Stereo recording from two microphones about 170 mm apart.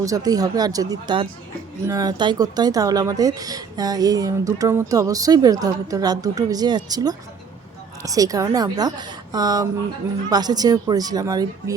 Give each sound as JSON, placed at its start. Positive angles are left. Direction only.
{"t": 0.0, "sound": "speech", "side_deg": -20}